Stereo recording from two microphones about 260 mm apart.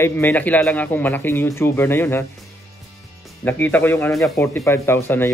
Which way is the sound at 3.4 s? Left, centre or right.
Centre.